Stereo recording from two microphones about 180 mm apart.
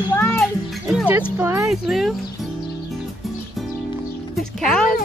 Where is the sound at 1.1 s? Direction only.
15° right (ahead or behind).